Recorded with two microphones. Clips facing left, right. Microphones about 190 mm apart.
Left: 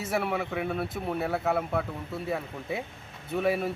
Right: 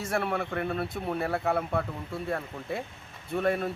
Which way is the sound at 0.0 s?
5° left (ahead or behind).